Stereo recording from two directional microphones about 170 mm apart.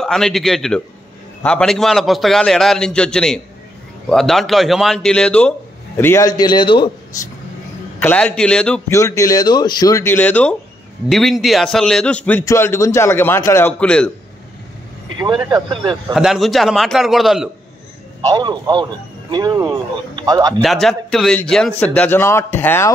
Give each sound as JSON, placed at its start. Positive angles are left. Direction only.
{"t": 0.0, "sound": "a man's voice", "side_deg": 0}
{"t": 8.8, "sound": "a man's voice", "side_deg": 20}
{"t": 15.1, "sound": "speech", "side_deg": -25}
{"t": 16.1, "sound": "a man's voice", "side_deg": -5}
{"t": 18.2, "sound": "speech", "side_deg": -25}
{"t": 20.6, "sound": "a man's voice", "side_deg": 0}